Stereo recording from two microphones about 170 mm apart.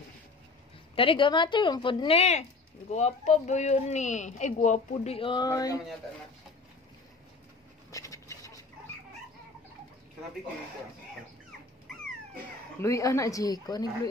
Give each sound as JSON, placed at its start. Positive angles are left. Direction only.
{"t": 0.9, "sound": "a woman's voice", "side_deg": 30}
{"t": 7.9, "sound": "scratch", "side_deg": 20}
{"t": 12.8, "sound": "a woman's voice", "side_deg": 15}